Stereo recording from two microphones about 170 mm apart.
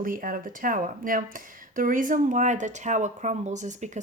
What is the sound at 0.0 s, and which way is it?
Speech, 55° right (ahead or behind).